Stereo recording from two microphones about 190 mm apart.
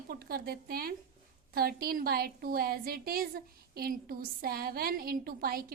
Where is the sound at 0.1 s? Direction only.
50° right (ahead or behind).